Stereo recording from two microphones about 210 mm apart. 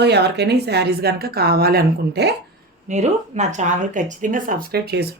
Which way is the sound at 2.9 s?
35° right (ahead or behind).